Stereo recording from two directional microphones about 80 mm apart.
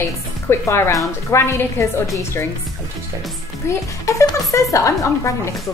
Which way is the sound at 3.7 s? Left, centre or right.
Left.